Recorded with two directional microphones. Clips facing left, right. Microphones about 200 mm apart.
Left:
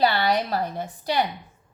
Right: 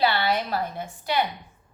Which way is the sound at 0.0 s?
40° left (ahead or behind).